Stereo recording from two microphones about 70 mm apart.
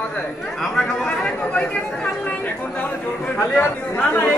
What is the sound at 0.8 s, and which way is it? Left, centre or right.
Speech, centre.